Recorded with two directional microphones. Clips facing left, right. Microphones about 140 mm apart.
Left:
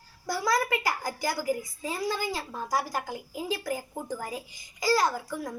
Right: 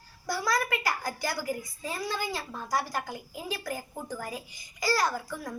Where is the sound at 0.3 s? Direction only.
20° left (ahead or behind).